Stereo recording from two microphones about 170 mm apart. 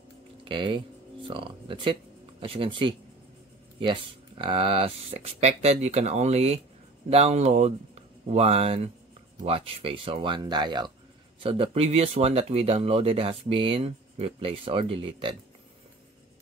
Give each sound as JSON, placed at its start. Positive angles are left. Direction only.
{"t": 0.5, "sound": "speech", "side_deg": -30}